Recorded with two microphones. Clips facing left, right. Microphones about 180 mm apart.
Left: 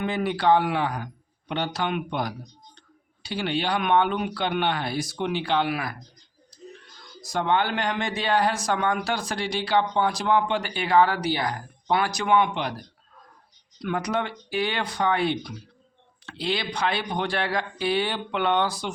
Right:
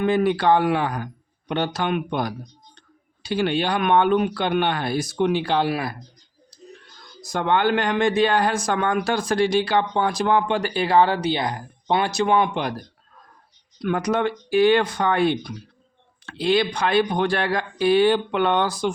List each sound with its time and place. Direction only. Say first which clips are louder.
0.0 s speech: right 5 dB; 50° right (ahead or behind); by 6.0 s 30° right (ahead or behind)
6.5 s a sound: left 2 dB; 35° right (ahead or behind)
7.2 s speech: right 3 dB; 50° right (ahead or behind)
13.8 s speech: right 5 dB; 50° right (ahead or behind)